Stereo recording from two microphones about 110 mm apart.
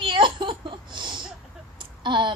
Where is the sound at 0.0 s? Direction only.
50° right (ahead or behind).